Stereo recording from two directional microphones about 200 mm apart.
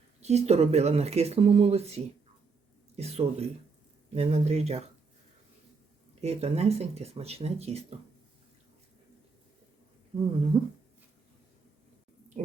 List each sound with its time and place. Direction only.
0.2 s speech: 35° right (ahead or behind)
6.2 s speech: 30° right (ahead or behind)
10.5 s a sound: 30° right (ahead or behind)